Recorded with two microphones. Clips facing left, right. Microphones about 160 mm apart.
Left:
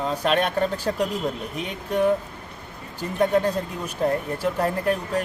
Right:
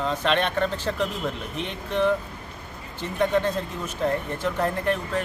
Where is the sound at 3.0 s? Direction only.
40° left (ahead or behind).